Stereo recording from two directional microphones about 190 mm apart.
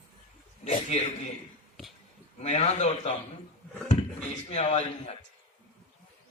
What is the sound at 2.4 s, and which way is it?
A man's voice, 35° left (ahead or behind).